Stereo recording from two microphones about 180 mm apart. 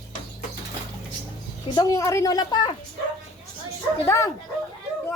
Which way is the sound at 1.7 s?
15° left (ahead or behind).